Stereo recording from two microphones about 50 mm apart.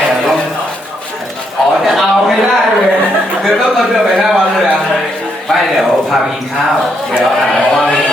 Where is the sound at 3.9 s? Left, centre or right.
Centre.